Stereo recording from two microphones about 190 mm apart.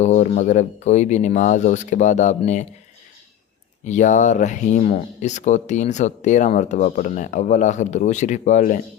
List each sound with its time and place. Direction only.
0.0 s speech: 40° left (ahead or behind)
3.8 s speech: 40° left (ahead or behind)